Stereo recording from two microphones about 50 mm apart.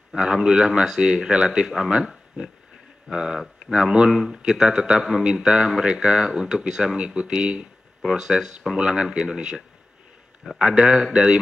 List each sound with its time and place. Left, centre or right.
0.1 s speech: centre
3.1 s speech: centre
10.6 s speech: centre